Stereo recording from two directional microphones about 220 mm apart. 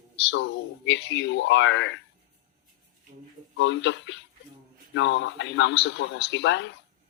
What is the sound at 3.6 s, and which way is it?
Speech, 55° left (ahead or behind).